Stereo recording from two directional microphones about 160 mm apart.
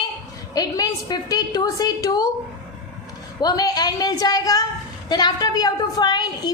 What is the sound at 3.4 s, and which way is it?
A woman's voice, 25° left (ahead or behind).